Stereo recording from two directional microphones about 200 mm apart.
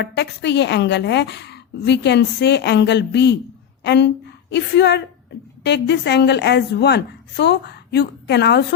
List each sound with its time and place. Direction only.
0.0 s a woman's voice: 60° left (ahead or behind)